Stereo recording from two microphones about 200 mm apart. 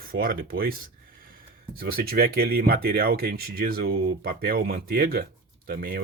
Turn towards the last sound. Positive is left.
turn(degrees=-50)  # may be behind; listen again after turning